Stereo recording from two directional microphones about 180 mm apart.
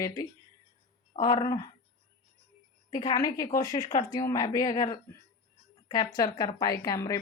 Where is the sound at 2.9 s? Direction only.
20° left (ahead or behind).